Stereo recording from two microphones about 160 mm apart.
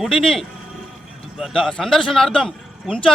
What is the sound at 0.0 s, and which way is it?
A man's voice, centre (ahead or behind).